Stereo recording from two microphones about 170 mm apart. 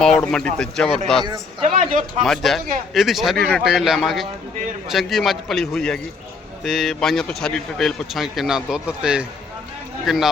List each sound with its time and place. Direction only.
0.0 s speech: 5° left (ahead or behind)
1.6 s speech: 50° right (ahead or behind)
2.2 s speech: centre (ahead or behind)